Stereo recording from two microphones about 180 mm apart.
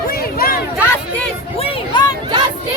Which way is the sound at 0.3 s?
55° left (ahead or behind).